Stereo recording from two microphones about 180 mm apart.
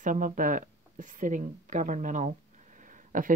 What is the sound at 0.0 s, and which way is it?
Speech, 50° right (ahead or behind).